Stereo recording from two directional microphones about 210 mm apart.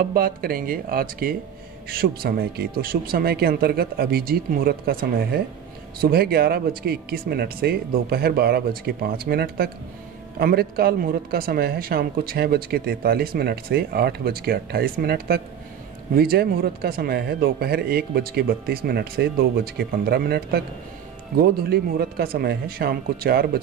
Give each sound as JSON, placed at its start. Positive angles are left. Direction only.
{"t": 0.0, "sound": "speech", "side_deg": -45}